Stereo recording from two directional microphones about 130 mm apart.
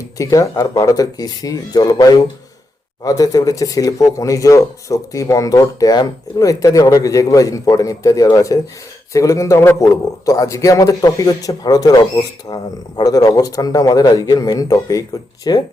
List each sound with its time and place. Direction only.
0.2 s a man's voice: 25° left (ahead or behind)